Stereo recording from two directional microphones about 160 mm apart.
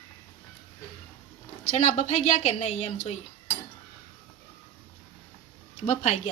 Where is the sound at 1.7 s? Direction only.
45° left (ahead or behind).